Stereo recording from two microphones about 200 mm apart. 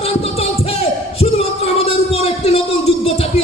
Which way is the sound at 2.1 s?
30° left (ahead or behind).